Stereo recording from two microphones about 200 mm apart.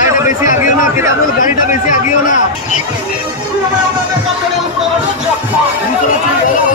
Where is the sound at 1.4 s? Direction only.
40° left (ahead or behind).